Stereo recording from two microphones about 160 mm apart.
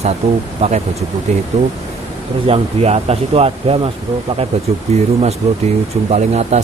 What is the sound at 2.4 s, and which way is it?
Speech, 40° right (ahead or behind).